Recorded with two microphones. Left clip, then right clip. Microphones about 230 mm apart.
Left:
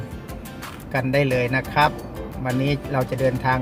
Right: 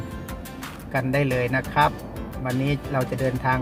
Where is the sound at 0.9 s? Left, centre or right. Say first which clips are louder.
Left 3 dB; centre.